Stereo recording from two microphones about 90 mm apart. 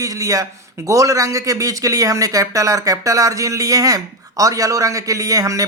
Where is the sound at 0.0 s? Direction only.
40° right (ahead or behind).